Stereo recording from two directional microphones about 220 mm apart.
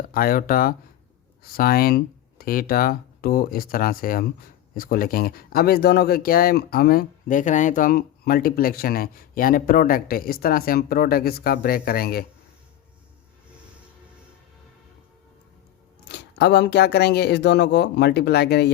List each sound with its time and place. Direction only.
0.1 s speech: 40° left (ahead or behind)
16.0 s speech: 50° left (ahead or behind)